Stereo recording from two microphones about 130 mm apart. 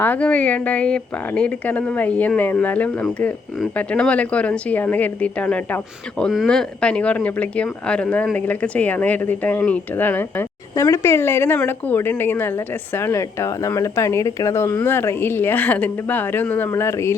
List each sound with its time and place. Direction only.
0.0 s a woman's voice: 10° left (ahead or behind)